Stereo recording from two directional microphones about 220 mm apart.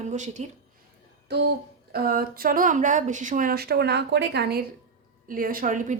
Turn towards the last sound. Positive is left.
turn(degrees=-35)  # may be behind; listen again after turning